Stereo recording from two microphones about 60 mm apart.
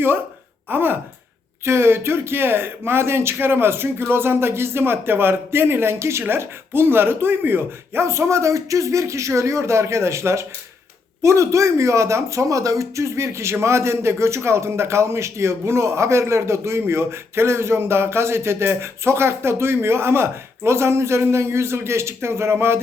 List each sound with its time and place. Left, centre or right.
0.7 s speech: right
1.6 s speech: right
8.0 s speech: right